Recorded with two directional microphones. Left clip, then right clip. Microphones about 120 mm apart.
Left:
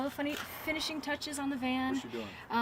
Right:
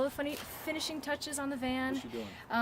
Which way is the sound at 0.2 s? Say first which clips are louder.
Left 1 dB; 25° right (ahead or behind).